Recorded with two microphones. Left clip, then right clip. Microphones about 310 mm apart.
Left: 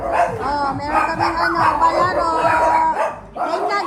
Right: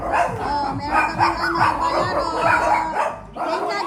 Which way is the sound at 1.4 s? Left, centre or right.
Centre.